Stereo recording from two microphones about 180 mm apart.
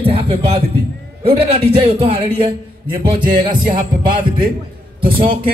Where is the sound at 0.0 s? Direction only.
30° right (ahead or behind).